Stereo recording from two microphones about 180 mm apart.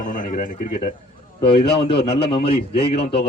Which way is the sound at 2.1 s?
30° left (ahead or behind).